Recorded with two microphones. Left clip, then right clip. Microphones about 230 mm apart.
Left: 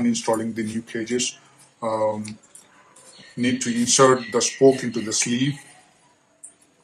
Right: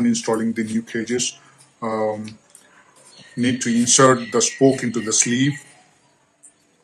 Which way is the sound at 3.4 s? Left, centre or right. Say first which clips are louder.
Right 3 dB; right.